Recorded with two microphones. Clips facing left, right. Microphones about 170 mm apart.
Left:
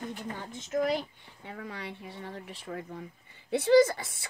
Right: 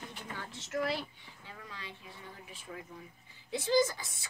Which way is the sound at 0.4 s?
15° left (ahead or behind).